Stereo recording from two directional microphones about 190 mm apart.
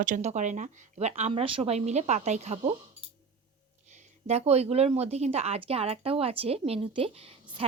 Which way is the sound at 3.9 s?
35° right (ahead or behind).